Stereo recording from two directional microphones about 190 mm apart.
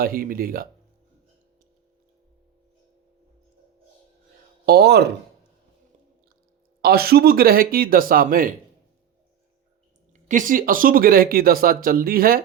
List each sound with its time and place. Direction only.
0.0 s speech: 50° right (ahead or behind)
4.6 s speech: 55° right (ahead or behind)
6.8 s speech: 55° right (ahead or behind)
10.1 s speech: 40° right (ahead or behind)